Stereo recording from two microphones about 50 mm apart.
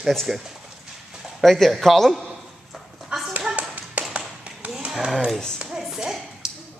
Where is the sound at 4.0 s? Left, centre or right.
Right.